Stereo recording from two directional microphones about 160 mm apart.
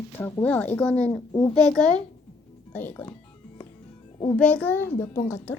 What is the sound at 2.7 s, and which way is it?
Speech, 10° left (ahead or behind).